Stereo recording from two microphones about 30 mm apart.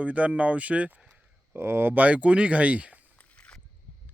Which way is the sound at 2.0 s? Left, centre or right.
Right.